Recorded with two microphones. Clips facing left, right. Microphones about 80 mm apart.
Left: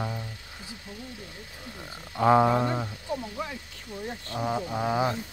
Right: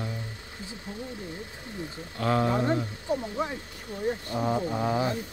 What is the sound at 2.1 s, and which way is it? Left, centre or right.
Speech, left.